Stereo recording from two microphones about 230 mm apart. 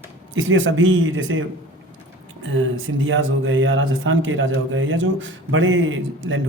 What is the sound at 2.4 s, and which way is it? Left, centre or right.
Speech, right.